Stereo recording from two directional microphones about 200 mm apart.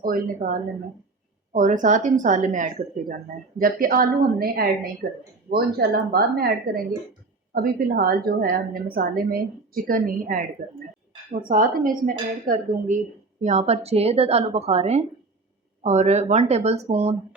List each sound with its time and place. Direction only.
0.0 s a woman's voice: 45° right (ahead or behind)
1.5 s a woman's voice: 40° right (ahead or behind)